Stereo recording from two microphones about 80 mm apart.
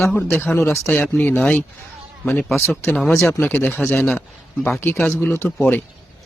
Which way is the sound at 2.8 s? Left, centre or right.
Centre.